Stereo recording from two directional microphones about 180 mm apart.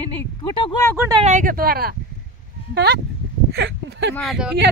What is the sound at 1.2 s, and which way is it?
Speech, 45° right (ahead or behind).